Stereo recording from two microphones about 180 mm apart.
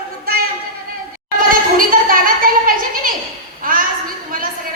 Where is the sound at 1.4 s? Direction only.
50° right (ahead or behind).